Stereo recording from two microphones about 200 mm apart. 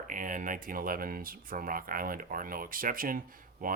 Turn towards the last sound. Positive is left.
turn(degrees=-45)  # may be behind; listen again after turning